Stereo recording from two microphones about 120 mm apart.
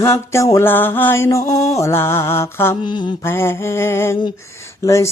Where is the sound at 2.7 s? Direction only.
40° left (ahead or behind).